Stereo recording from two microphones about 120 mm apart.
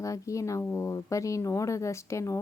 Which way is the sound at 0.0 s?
25° left (ahead or behind).